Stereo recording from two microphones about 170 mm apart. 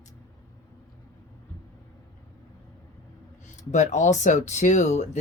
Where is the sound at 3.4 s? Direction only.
45° left (ahead or behind).